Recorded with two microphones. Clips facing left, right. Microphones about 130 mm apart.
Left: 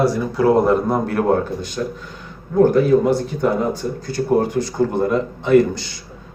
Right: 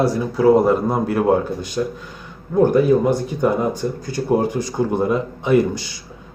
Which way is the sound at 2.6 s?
15° right (ahead or behind).